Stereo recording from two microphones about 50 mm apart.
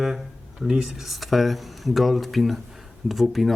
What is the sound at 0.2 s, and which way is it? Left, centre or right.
Speech, centre.